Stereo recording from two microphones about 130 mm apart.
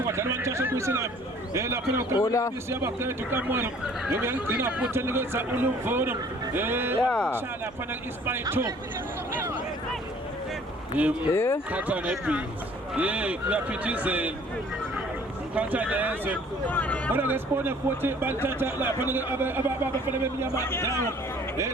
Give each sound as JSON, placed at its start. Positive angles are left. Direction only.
{"t": 0.1, "sound": "a sound", "side_deg": -20}
{"t": 1.5, "sound": "a man's voice", "side_deg": -20}
{"t": 7.0, "sound": "speech", "side_deg": 10}
{"t": 7.3, "sound": "a man's voice", "side_deg": -15}
{"t": 11.0, "sound": "a man's voice", "side_deg": -10}
{"t": 11.3, "sound": "speech", "side_deg": 20}
{"t": 11.7, "sound": "a man's voice", "side_deg": -10}
{"t": 15.5, "sound": "a man's voice", "side_deg": -10}
{"t": 16.6, "sound": "speech", "side_deg": 10}
{"t": 17.1, "sound": "a man's voice", "side_deg": -15}
{"t": 20.6, "sound": "a man's voice", "side_deg": 20}